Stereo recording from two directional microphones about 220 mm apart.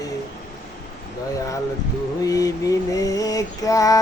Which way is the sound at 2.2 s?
15° left (ahead or behind).